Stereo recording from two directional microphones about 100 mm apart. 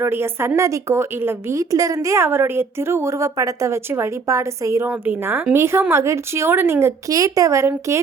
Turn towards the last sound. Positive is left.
turn(degrees=-30)  # may be behind; listen again after turning